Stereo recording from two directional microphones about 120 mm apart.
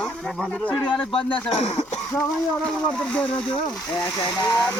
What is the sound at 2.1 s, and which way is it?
Speech, 5° left (ahead or behind).